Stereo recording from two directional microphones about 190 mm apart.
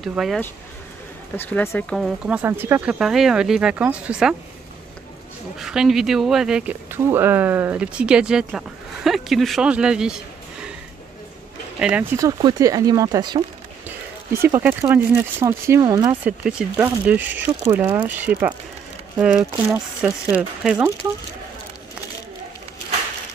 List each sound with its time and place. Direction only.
0.0 s speech: centre (ahead or behind)
1.3 s speech: 10° left (ahead or behind)
2.0 s speech: 5° right (ahead or behind)
5.6 s speech: 5° right (ahead or behind)
11.8 s speech: 10° right (ahead or behind)
16.3 s speech: 5° right (ahead or behind)